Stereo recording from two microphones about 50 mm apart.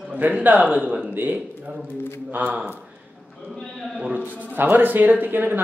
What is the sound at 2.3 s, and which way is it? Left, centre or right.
Speech, right.